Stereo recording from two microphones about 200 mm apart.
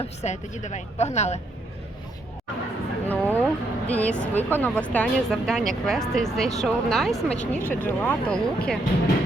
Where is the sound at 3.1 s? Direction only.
10° left (ahead or behind).